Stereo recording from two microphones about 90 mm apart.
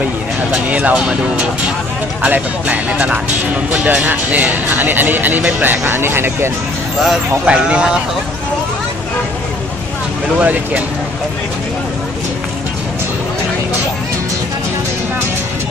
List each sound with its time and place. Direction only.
0.5 s speech: 15° right (ahead or behind)
7.0 s speech: 5° right (ahead or behind)
10.4 s speech: 15° right (ahead or behind)